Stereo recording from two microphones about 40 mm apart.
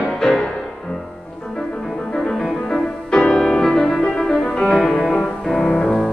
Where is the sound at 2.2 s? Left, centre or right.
Centre.